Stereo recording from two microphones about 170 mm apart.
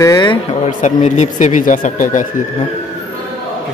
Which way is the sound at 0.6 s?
45° left (ahead or behind).